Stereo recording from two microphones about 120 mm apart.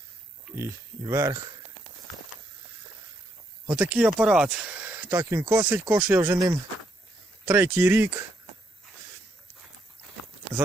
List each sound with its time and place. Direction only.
0.5 s speech: 25° right (ahead or behind)
3.7 s speech: 10° right (ahead or behind)
6.3 s speech: 30° right (ahead or behind)
7.4 s speech: 15° right (ahead or behind)